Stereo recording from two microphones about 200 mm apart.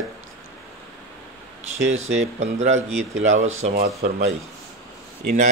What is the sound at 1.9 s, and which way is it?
Speech, 80° right.